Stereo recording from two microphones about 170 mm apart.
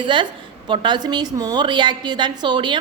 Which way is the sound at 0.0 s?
25° right (ahead or behind).